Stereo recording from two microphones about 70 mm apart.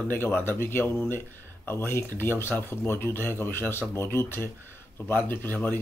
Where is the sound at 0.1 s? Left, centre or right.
Left.